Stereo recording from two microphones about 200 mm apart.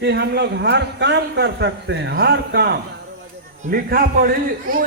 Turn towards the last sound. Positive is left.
turn(degrees=-45)  # may be behind; listen again after turning